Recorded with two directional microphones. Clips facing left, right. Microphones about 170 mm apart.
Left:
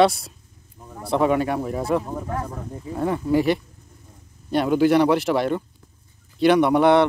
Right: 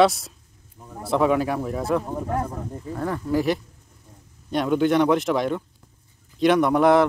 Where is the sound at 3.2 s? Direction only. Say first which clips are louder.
Left 2 dB; centre (ahead or behind).